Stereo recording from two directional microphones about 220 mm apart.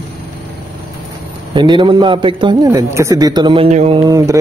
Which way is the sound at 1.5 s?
20° right (ahead or behind).